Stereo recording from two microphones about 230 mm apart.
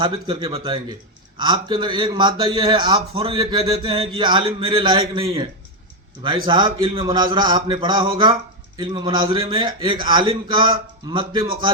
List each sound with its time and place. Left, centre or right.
0.0 s a man's voice: right